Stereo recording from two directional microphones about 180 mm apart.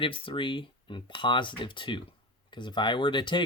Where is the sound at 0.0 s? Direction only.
30° left (ahead or behind).